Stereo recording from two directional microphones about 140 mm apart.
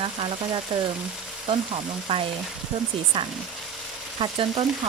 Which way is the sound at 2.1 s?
40° right (ahead or behind).